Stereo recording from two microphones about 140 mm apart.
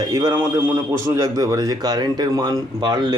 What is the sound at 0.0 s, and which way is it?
Speech, 25° right (ahead or behind).